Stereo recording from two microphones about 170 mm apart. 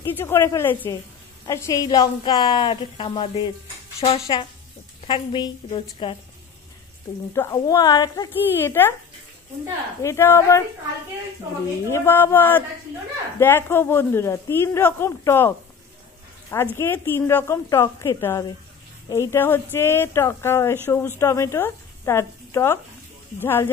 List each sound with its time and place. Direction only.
0.0 s a woman's voice: 15° left (ahead or behind)
7.3 s a woman's voice: 20° left (ahead or behind)
10.0 s speech: 15° left (ahead or behind)
11.9 s speech: 15° left (ahead or behind)
16.7 s speech: 15° left (ahead or behind)